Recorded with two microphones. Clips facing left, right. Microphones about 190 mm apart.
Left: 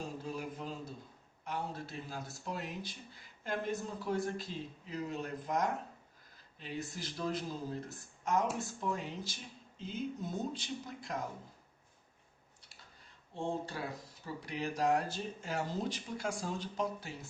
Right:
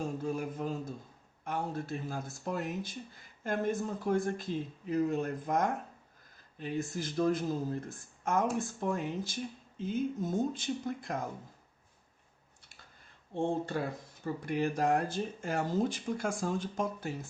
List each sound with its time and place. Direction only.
0.2 s a sound: 50° right (ahead or behind)
1.5 s speech: 50° right (ahead or behind)
13.3 s speech: 55° right (ahead or behind)